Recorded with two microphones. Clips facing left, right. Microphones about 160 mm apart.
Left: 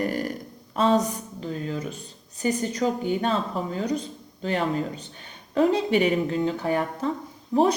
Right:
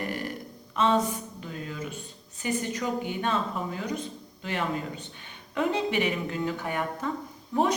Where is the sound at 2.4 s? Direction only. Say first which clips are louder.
Left 5 dB; 40° left (ahead or behind).